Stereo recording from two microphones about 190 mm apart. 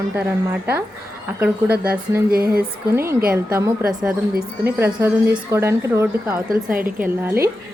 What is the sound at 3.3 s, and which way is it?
Speech, 15° right (ahead or behind).